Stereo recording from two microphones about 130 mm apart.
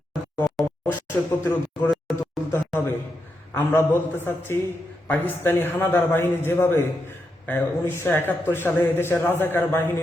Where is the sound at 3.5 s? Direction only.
20° left (ahead or behind).